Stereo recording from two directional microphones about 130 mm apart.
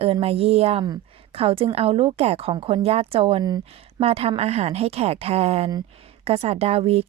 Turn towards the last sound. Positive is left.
turn(degrees=-50)  # may be behind; listen again after turning